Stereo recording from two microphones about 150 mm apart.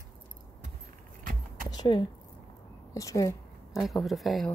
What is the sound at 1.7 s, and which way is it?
Speech, 30° left (ahead or behind).